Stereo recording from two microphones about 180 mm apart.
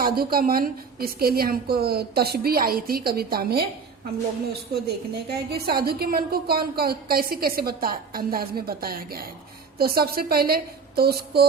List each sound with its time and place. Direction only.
0.0 s a woman's voice: 55° right (ahead or behind)
4.7 s a woman's voice: 60° right (ahead or behind)